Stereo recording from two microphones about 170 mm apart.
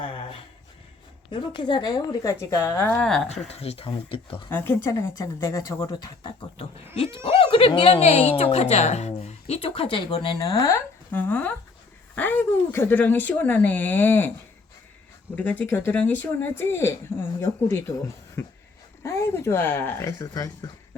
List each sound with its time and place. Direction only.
0.0 s a sound: 30° left (ahead or behind)
1.3 s a woman's voice: 30° left (ahead or behind); by 3.2 s 5° left (ahead or behind)
3.2 s a woman's voice: 40° left (ahead or behind)
4.5 s speech: 10° left (ahead or behind); by 10.4 s 30° left (ahead or behind)
10.4 s speech: 20° left (ahead or behind)
15.4 s a woman's voice: 10° left (ahead or behind)